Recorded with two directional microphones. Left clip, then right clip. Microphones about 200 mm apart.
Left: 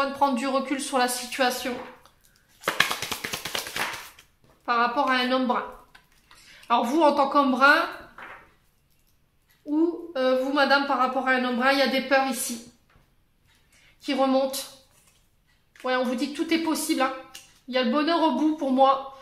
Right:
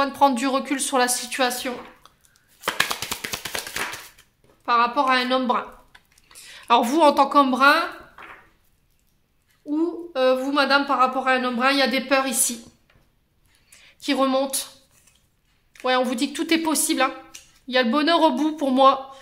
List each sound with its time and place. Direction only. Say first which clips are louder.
0.0 s a woman's voice: right 5 dB; 30° right (ahead or behind)
2.6 s tap: even; 25° right (ahead or behind)
4.6 s a woman's voice: right 4 dB; 25° right (ahead or behind)
6.4 s speech: right 5 dB; 40° right (ahead or behind); by 7.8 s 25° right (ahead or behind)
9.7 s a woman's voice: even; 30° right (ahead or behind)
13.9 s a woman's voice: right 2 dB; 35° right (ahead or behind)
15.8 s a woman's voice: right 4 dB; 35° right (ahead or behind)